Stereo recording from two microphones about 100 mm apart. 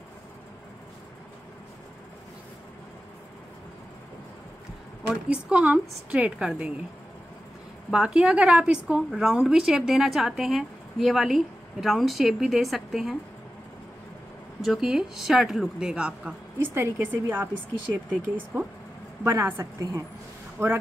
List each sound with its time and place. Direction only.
5.0 s a woman's voice: 10° right (ahead or behind)
7.9 s a woman's voice: 10° right (ahead or behind)
14.6 s a woman's voice: 5° right (ahead or behind)
16.5 s a woman's voice: 25° right (ahead or behind)
19.2 s a woman's voice: 25° right (ahead or behind)